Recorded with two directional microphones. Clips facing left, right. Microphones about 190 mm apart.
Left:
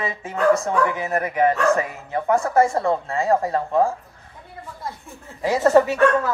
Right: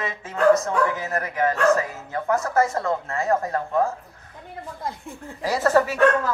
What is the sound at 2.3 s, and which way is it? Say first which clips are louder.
A man's voice: left 3 dB; 30° left (ahead or behind).